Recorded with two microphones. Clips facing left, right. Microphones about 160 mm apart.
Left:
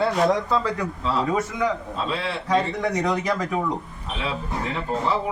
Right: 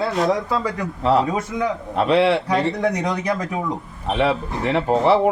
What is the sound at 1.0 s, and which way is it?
A man's voice, 65° right (ahead or behind).